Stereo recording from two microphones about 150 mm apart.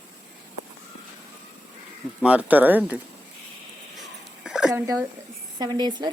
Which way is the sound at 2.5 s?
10° right (ahead or behind).